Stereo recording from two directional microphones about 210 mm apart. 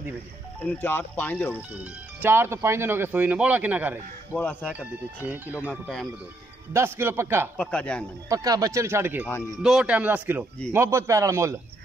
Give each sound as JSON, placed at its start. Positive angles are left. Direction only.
{"t": 0.6, "sound": "speech", "side_deg": 10}
{"t": 2.2, "sound": "speech", "side_deg": -10}
{"t": 4.3, "sound": "speech", "side_deg": 10}
{"t": 4.7, "sound": "speech", "side_deg": -5}
{"t": 6.7, "sound": "speech", "side_deg": -10}
{"t": 7.5, "sound": "speech", "side_deg": 5}
{"t": 8.3, "sound": "speech", "side_deg": -15}